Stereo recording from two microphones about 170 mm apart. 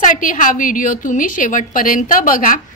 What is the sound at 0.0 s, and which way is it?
A woman's voice, 50° left (ahead or behind).